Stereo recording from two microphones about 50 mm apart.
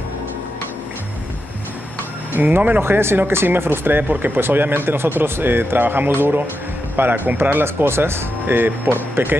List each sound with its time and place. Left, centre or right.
2.3 s speech: right
2.8 s speech: right
8.5 s speech: right